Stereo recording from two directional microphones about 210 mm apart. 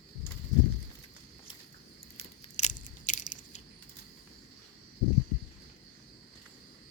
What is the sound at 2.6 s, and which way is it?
Biting, 35° left (ahead or behind).